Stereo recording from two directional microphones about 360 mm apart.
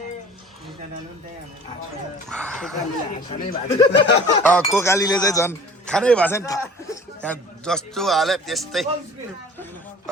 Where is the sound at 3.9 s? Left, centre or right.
Left.